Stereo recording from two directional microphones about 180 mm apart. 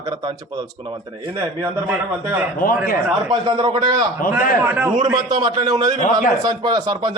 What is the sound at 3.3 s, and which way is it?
Speech, 20° right (ahead or behind).